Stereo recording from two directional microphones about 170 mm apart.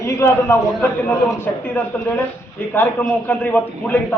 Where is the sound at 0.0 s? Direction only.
15° left (ahead or behind).